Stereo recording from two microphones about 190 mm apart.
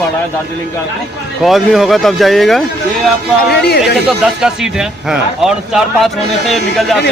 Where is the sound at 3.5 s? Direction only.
60° left (ahead or behind).